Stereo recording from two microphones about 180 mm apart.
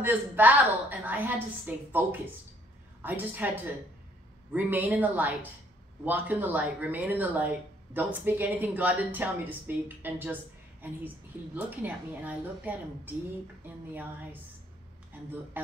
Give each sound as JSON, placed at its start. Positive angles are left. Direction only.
{"t": 0.0, "sound": "speech", "side_deg": -10}
{"t": 15.6, "sound": "speech", "side_deg": -10}